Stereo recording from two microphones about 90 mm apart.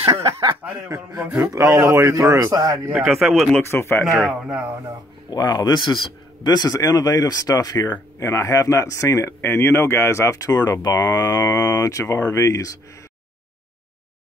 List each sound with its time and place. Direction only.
0.8 s a man's voice: 40° right (ahead or behind)
3.0 s speech: centre (ahead or behind)
3.5 s speech: 25° left (ahead or behind)
4.2 s speech: 5° right (ahead or behind)
5.3 s a man's voice: 50° left (ahead or behind)
8.2 s speech: 35° left (ahead or behind)